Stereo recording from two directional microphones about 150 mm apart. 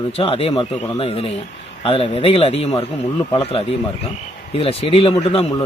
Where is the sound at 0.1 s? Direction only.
40° left (ahead or behind).